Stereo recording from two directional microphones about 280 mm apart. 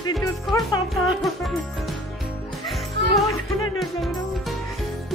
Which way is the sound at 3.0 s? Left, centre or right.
Right.